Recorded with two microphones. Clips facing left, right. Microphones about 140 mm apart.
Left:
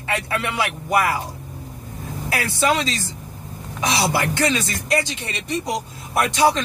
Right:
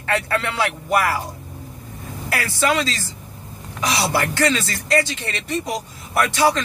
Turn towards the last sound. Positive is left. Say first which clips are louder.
# even
turn(degrees=15)  # may be behind; listen again after turning